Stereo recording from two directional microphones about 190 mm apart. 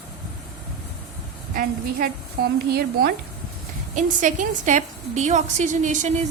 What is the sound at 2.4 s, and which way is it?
Speech, 55° right (ahead or behind).